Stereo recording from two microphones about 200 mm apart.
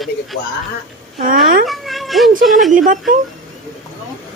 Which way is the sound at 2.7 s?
40° right (ahead or behind).